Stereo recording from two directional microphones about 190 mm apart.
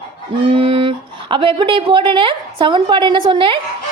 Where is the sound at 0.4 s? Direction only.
30° right (ahead or behind).